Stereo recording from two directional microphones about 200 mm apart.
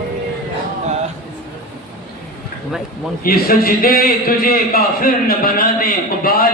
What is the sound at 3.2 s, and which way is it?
A man's voice, 50° left (ahead or behind).